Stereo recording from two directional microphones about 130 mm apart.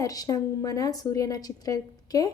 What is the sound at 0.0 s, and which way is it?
A woman's voice, 30° left (ahead or behind).